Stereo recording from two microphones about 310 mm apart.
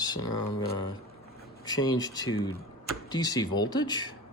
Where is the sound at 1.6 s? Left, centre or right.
Centre.